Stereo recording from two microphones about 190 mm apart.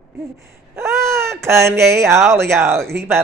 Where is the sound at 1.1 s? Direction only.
15° right (ahead or behind).